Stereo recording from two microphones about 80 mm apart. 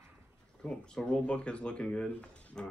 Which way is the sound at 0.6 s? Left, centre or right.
Centre.